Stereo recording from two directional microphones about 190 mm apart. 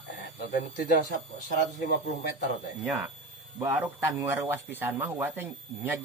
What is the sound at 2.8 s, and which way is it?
Speech, 5° right (ahead or behind).